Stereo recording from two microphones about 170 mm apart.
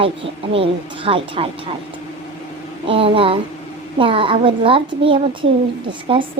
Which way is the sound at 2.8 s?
35° right (ahead or behind).